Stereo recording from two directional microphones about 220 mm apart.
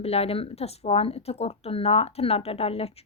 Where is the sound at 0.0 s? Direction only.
25° left (ahead or behind).